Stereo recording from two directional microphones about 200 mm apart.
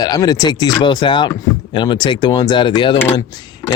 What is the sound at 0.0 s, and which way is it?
Speech, 20° left (ahead or behind).